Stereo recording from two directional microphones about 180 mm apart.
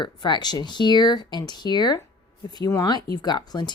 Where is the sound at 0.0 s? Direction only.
25° left (ahead or behind).